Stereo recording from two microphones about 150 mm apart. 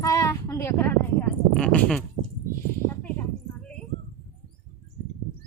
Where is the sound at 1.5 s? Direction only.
5° left (ahead or behind).